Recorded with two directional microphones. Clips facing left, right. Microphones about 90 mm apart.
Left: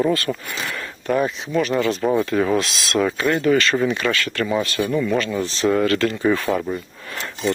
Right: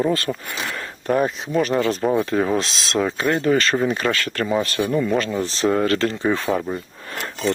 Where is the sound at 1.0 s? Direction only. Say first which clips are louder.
Right 1 dB; 40° right (ahead or behind).